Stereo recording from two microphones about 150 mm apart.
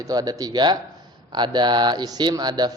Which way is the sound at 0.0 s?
25° right (ahead or behind).